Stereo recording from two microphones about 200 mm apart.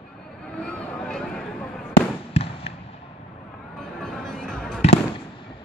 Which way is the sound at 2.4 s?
30° left (ahead or behind).